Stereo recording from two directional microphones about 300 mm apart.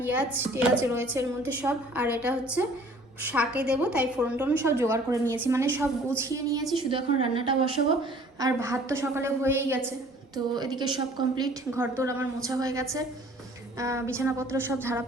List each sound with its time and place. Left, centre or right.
0.0 s a woman's voice: centre